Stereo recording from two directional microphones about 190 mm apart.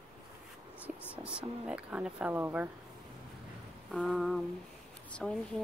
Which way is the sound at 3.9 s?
Centre (ahead or behind).